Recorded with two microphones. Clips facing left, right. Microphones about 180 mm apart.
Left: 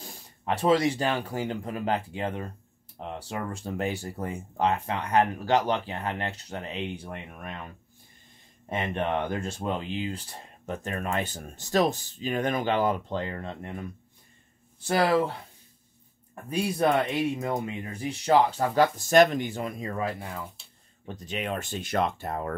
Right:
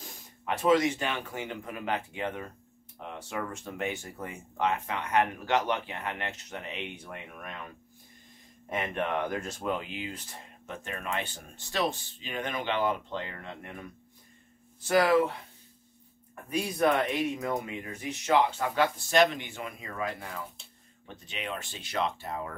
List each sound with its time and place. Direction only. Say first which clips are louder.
0.0 s speech: left 3 dB; 30° left (ahead or behind)
8.6 s speech: left 3 dB; 25° left (ahead or behind)
16.4 s speech: left 2 dB; 30° left (ahead or behind)
21.0 s speech: left 6 dB; 40° left (ahead or behind)